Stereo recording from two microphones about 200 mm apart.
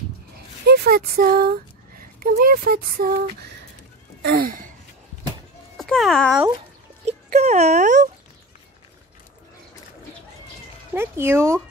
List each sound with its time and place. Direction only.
0.7 s speech: 50° right (ahead or behind)
4.2 s gasp: 50° right (ahead or behind)
5.8 s a child's voice: centre (ahead or behind)
7.1 s speech: 35° right (ahead or behind)
11.0 s speech: 10° right (ahead or behind)